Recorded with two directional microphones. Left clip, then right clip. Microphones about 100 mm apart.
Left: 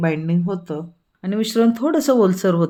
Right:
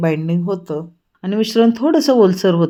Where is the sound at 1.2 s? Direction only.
Centre (ahead or behind).